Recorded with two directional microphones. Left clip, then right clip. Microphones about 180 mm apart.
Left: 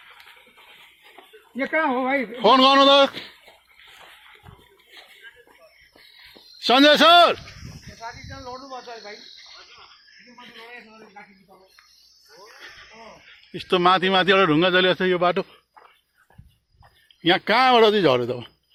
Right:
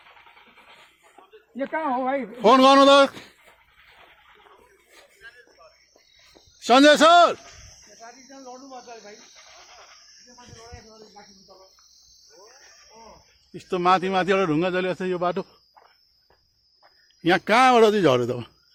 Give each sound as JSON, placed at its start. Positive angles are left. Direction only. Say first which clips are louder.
{"t": 1.5, "sound": "speech", "louder": "left 5 dB", "side_deg": -5}
{"t": 2.4, "sound": "a man's voice", "louder": "even", "side_deg": -30}
{"t": 6.6, "sound": "a man's voice", "louder": "even", "side_deg": -10}
{"t": 8.0, "sound": "speech", "louder": "left 7 dB", "side_deg": 10}
{"t": 13.5, "sound": "speech", "louder": "left 2 dB", "side_deg": 10}
{"t": 15.2, "sound": "a man's voice", "louder": "left 4 dB", "side_deg": -10}
{"t": 17.2, "sound": "speech", "louder": "even", "side_deg": -25}